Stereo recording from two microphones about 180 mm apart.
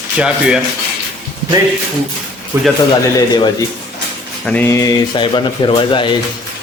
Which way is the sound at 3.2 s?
25° left (ahead or behind).